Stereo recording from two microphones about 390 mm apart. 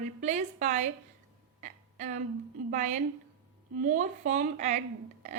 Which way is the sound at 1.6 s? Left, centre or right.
Centre.